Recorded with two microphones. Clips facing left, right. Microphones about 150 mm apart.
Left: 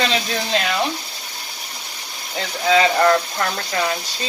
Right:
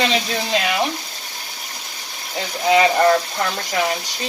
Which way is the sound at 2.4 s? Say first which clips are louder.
Right 1 dB; 15° right (ahead or behind).